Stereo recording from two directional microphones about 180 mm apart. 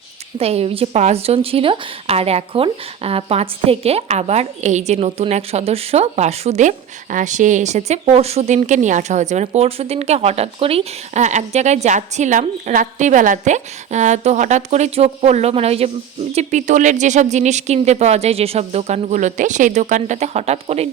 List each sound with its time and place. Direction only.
0.3 s speech: 35° right (ahead or behind)